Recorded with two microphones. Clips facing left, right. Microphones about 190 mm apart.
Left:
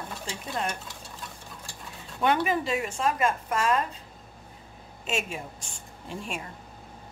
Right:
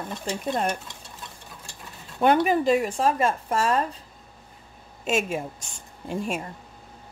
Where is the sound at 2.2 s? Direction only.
40° right (ahead or behind).